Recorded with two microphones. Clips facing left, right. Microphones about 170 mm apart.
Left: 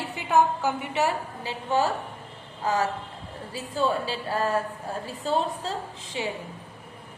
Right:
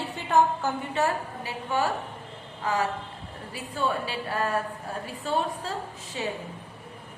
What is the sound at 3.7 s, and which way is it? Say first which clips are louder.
Speech: left 3 dB; 30° left (ahead or behind).